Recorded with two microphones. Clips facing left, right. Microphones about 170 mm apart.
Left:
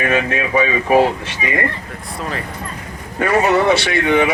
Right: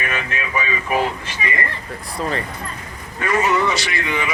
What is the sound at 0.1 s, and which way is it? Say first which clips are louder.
Speech: left 8 dB; 60° left (ahead or behind).